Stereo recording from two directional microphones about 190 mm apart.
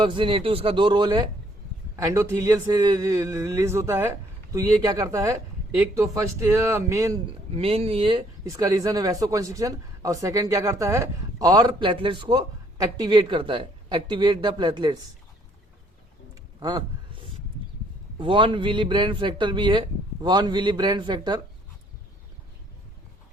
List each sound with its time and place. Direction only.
0.0 s speech: 25° right (ahead or behind)
7.5 s speech: 30° right (ahead or behind)
16.6 s a sound: 20° right (ahead or behind)
18.2 s speech: 25° right (ahead or behind)